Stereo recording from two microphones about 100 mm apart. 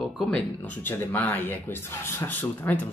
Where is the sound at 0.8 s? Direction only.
20° left (ahead or behind).